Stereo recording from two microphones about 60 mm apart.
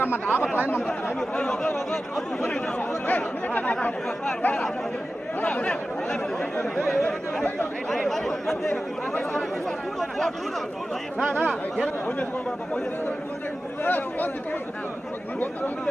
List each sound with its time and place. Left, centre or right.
0.0 s speech: left
1.4 s speech: centre
3.1 s speech: left; by 7.4 s centre
7.9 s chatter: centre
9.9 s speech: centre
11.3 s speech: centre
13.8 s speech: left